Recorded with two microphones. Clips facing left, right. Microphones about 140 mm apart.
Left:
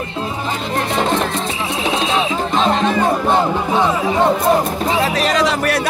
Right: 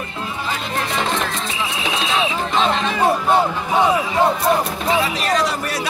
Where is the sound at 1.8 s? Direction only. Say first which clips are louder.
Left 6 dB; 40° left (ahead or behind).